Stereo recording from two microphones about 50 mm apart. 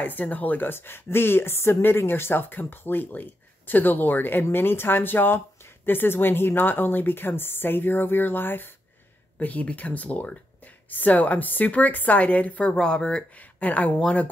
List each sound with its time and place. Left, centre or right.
0.0 s a woman's voice: left
9.4 s speech: left
12.7 s speech: centre
13.3 s speech: left